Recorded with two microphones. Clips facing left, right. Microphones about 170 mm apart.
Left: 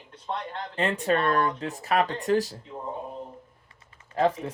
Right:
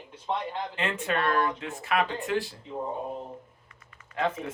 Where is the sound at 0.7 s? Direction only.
35° left (ahead or behind).